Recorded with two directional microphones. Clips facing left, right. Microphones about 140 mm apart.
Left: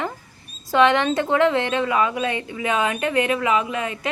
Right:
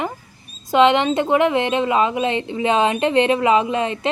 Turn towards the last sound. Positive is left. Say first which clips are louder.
# right 5 dB
turn(degrees=-30)  # may be behind; listen again after turning